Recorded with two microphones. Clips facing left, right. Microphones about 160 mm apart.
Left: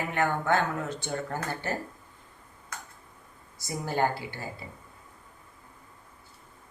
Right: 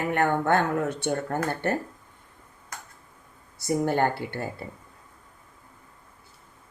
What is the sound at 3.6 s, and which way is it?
Speech, 60° right (ahead or behind).